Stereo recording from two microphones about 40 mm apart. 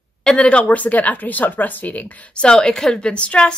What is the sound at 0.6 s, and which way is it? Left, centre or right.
A woman's voice, left.